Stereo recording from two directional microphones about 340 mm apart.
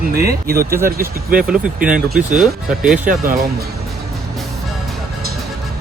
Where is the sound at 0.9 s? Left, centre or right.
Right.